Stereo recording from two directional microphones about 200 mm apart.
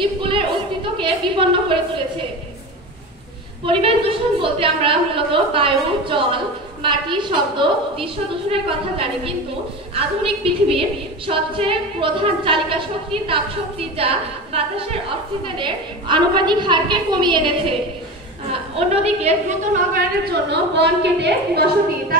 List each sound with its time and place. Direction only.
0.0 s a sound: 25° right (ahead or behind)
0.9 s a woman's voice: 25° right (ahead or behind)
4.4 s a woman's voice: 25° right (ahead or behind); by 21.6 s 55° right (ahead or behind)